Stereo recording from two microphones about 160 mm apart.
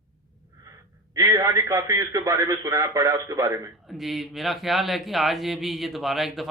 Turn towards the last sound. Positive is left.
turn(degrees=0)  # may be behind; listen again after turning